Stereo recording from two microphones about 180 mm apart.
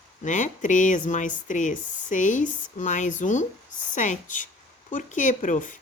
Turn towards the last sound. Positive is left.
turn(degrees=45)  # may be behind; listen again after turning